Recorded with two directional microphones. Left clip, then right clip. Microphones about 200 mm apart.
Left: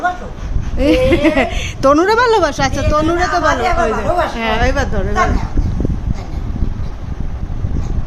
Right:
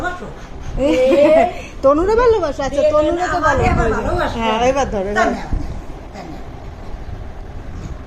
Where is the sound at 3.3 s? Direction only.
45° left (ahead or behind).